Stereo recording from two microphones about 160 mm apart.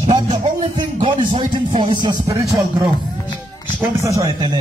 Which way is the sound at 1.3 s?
30° right (ahead or behind).